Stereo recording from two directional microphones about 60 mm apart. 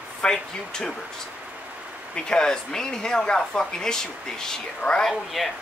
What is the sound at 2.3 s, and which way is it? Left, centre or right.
Speech, centre.